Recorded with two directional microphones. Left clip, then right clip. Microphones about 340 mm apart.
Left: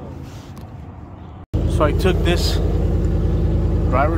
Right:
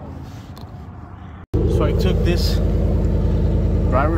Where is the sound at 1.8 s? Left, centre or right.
Centre.